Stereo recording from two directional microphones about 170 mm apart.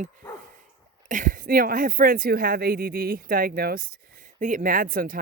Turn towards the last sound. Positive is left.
turn(degrees=-55)  # may be behind; listen again after turning